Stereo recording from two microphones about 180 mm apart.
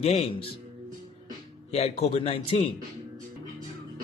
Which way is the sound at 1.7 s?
35° left (ahead or behind).